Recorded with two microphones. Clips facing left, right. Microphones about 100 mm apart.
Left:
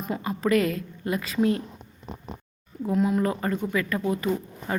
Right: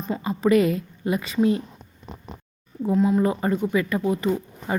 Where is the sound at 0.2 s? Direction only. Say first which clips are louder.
Right 4 dB; 5° right (ahead or behind).